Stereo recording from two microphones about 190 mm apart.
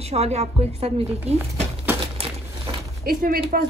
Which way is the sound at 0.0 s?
35° right (ahead or behind).